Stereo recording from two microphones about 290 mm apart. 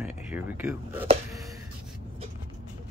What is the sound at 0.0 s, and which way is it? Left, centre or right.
Speech, centre.